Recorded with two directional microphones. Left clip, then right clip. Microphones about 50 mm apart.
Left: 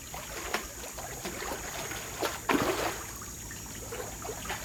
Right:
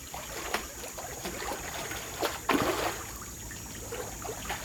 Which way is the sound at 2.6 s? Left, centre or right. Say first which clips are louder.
Right 1 dB; right.